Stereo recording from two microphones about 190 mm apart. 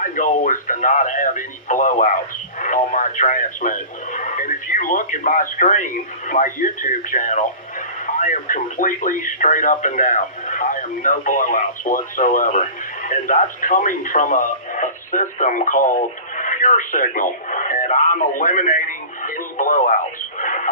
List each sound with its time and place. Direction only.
0.0 s speech: 45° left (ahead or behind)
20.4 s radio: 45° left (ahead or behind)